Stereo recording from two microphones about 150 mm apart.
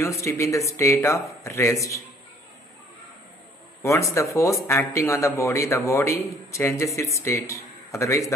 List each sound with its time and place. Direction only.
0.0 s speech: 20° left (ahead or behind)
3.8 s speech: 20° left (ahead or behind)